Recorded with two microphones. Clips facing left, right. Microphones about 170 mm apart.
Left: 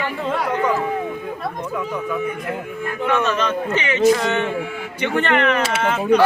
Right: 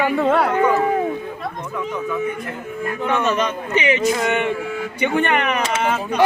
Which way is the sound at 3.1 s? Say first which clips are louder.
Even; 15° right (ahead or behind).